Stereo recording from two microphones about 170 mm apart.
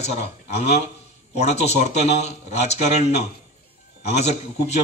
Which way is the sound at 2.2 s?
40° left (ahead or behind).